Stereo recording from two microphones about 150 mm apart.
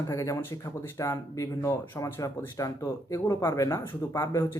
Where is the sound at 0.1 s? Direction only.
20° left (ahead or behind).